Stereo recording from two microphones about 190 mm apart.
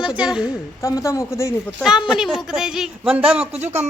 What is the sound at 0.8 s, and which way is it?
Speech, 15° left (ahead or behind).